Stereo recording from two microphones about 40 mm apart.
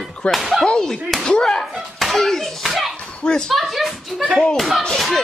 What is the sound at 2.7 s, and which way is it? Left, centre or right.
Slap, centre.